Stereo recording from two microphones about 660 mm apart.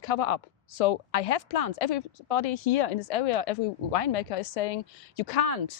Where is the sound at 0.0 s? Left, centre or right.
Left.